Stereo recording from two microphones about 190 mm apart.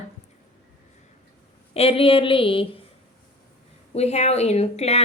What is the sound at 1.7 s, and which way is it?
Speech, 30° left (ahead or behind).